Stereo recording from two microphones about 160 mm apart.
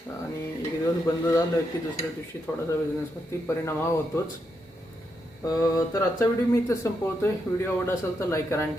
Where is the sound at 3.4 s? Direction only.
15° left (ahead or behind).